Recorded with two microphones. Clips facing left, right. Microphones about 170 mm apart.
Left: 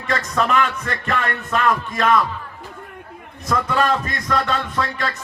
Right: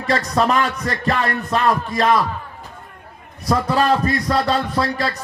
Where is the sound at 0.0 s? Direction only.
35° right (ahead or behind).